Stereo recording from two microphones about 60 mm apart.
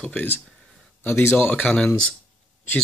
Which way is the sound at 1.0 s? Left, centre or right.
Left.